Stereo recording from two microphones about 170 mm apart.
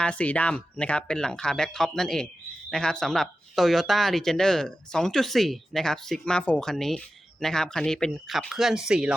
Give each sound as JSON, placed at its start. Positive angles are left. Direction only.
{"t": 0.0, "sound": "speech", "side_deg": 5}